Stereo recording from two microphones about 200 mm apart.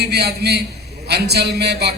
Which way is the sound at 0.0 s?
55° right (ahead or behind).